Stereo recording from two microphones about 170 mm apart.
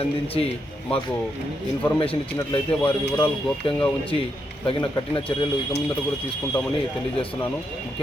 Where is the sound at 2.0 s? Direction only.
30° left (ahead or behind).